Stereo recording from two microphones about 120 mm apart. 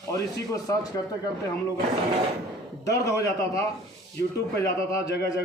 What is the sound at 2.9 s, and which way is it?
A man's voice, 25° left (ahead or behind).